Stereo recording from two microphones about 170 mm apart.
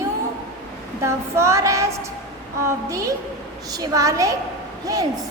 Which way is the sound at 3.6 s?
20° right (ahead or behind).